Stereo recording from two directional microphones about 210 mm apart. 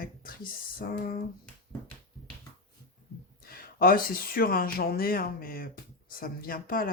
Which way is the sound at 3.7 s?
45° left (ahead or behind).